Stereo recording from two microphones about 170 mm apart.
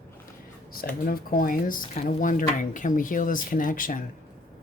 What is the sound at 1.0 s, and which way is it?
Speech, 60° left (ahead or behind).